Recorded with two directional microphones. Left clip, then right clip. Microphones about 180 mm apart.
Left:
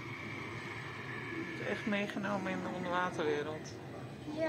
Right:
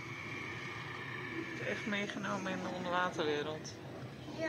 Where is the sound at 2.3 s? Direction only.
Centre (ahead or behind).